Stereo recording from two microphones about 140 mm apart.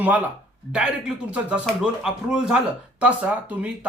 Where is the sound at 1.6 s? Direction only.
5° right (ahead or behind).